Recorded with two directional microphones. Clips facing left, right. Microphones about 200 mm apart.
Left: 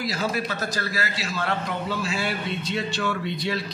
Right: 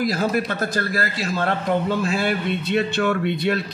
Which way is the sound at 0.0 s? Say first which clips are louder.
Right 6 dB; 50° right (ahead or behind).